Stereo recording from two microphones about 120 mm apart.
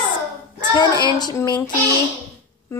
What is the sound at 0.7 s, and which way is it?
Speech, 35° left (ahead or behind).